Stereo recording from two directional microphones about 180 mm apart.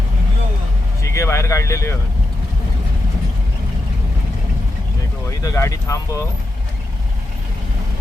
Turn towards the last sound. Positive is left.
turn(degrees=20)  # may be behind; listen again after turning